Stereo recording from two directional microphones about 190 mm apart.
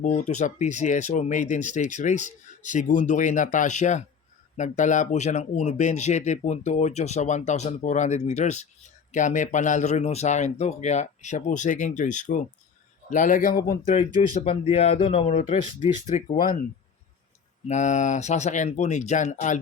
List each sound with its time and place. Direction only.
0.0 s speech: 40° left (ahead or behind)
14.2 s speech: 35° left (ahead or behind)
17.7 s speech: 40° left (ahead or behind)